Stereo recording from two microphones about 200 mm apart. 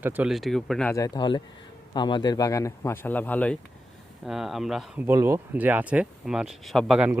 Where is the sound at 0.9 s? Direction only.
20° left (ahead or behind).